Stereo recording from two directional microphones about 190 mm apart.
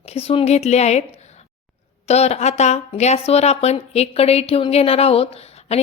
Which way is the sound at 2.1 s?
35° left (ahead or behind).